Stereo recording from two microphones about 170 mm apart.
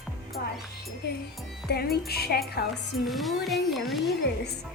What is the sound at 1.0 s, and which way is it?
Music, 75° left (ahead or behind).